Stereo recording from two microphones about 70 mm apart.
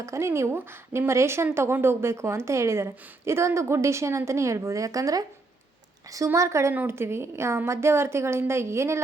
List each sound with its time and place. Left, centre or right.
0.0 s a woman's voice: right